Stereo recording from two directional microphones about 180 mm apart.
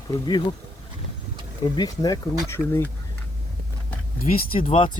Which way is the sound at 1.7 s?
20° left (ahead or behind).